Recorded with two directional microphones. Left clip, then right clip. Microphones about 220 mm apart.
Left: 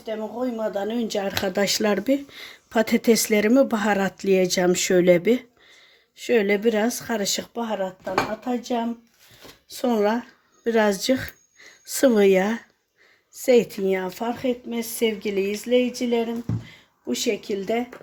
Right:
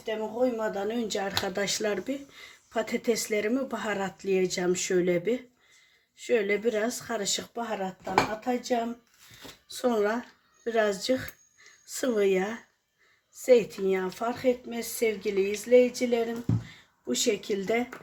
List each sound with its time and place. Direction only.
0.0 s speech: 20° left (ahead or behind)